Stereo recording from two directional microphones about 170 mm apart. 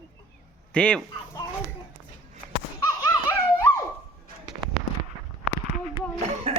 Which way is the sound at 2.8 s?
15° left (ahead or behind).